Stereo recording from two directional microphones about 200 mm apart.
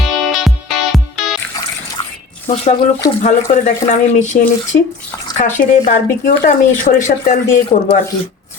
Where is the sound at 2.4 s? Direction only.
35° left (ahead or behind).